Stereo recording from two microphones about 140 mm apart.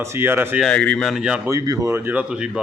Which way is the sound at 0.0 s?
15° right (ahead or behind).